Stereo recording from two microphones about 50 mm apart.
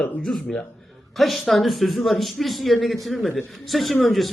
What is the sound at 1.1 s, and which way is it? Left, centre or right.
A man's voice, centre.